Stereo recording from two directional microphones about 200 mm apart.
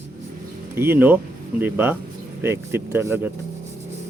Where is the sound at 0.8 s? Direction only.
10° right (ahead or behind).